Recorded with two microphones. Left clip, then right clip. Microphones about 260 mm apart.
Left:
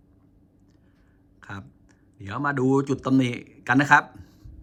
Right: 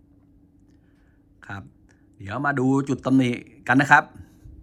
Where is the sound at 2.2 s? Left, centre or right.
Centre.